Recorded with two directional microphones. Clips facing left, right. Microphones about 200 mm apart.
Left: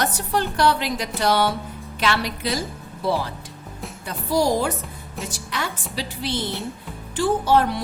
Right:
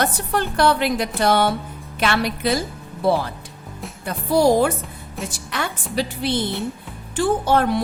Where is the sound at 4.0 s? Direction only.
55° right (ahead or behind).